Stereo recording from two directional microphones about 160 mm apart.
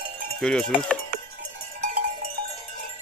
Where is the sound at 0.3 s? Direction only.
5° left (ahead or behind).